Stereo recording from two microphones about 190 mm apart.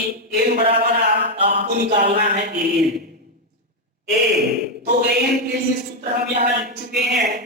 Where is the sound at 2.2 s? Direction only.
50° right (ahead or behind).